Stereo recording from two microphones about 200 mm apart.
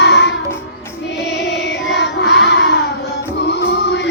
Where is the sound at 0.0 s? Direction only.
60° left (ahead or behind).